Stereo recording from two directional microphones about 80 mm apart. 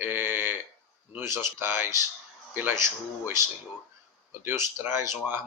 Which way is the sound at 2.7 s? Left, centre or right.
Right.